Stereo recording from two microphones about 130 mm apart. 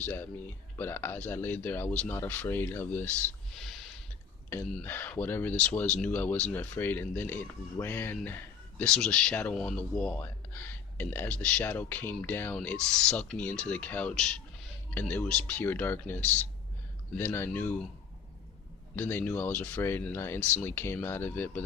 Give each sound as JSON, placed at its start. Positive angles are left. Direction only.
{"t": 0.0, "sound": "speech", "side_deg": 15}
{"t": 3.5, "sound": "a sound", "side_deg": 0}
{"t": 4.7, "sound": "speech", "side_deg": 15}
{"t": 18.9, "sound": "speech", "side_deg": 15}